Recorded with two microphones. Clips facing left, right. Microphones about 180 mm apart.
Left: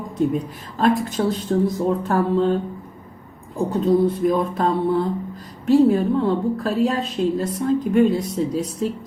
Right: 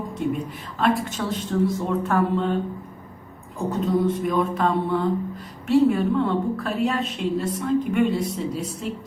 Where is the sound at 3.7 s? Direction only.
35° left (ahead or behind).